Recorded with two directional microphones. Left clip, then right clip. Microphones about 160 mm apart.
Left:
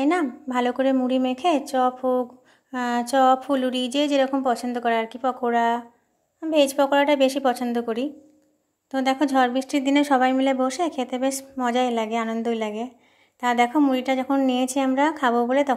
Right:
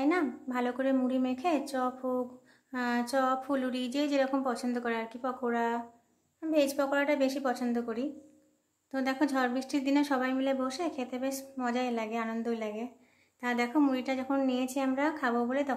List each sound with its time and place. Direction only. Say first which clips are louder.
0.0 s a woman's voice: left 7 dB; 35° left (ahead or behind)